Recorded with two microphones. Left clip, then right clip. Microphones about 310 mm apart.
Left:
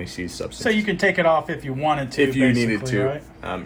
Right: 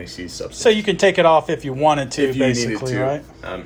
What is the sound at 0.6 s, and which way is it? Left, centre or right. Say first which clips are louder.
Speech: right 6 dB; centre.